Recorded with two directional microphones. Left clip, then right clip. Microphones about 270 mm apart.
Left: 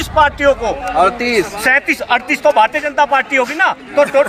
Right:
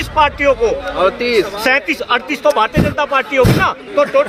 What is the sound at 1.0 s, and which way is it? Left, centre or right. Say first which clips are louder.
Speech: left 1 dB; left.